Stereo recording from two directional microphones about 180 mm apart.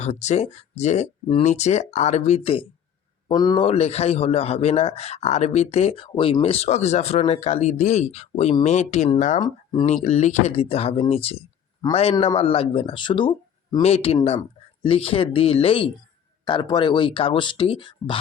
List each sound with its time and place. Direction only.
0.0 s a man's voice: 40° left (ahead or behind)